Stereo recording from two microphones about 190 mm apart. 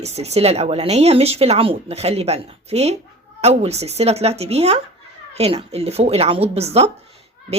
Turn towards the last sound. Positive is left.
turn(degrees=-35)  # may be behind; listen again after turning